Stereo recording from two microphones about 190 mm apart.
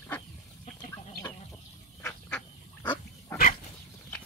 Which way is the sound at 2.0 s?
10° left (ahead or behind).